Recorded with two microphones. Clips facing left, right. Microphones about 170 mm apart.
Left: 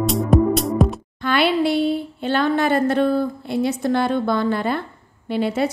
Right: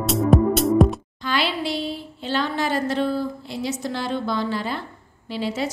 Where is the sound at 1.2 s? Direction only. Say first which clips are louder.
Left 7 dB; 55° left (ahead or behind).